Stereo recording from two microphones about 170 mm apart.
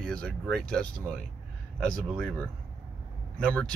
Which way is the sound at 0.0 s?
5° left (ahead or behind).